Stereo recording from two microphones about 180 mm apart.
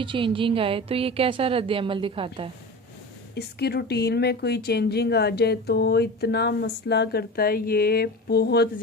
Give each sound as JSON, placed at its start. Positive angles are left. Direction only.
{"t": 0.0, "sound": "a woman's voice", "side_deg": -30}
{"t": 3.3, "sound": "speech", "side_deg": 65}